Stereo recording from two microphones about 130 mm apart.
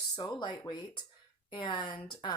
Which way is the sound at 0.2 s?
35° left (ahead or behind).